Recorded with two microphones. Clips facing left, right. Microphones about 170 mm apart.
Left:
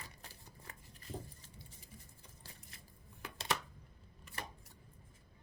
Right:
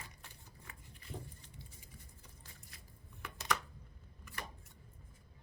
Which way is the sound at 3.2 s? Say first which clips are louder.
Right 1 dB; 30° left (ahead or behind).